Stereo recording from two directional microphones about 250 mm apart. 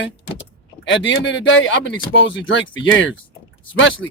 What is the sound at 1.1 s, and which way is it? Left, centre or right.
Speech, left.